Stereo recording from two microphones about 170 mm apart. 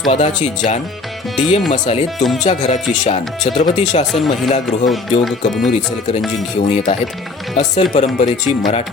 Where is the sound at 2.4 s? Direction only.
45° left (ahead or behind).